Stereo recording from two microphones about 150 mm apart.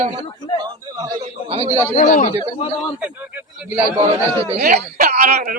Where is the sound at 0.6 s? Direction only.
25° right (ahead or behind).